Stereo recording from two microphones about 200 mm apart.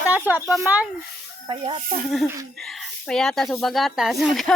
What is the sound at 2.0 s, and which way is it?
Speech, centre (ahead or behind).